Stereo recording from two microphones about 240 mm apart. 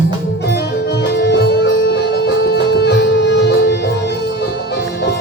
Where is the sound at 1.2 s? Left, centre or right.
Left.